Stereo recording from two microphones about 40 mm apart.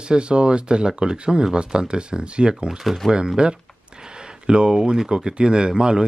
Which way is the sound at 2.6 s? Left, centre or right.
Centre.